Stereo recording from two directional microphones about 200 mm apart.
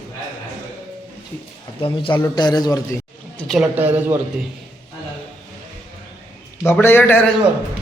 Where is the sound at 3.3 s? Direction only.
Centre (ahead or behind).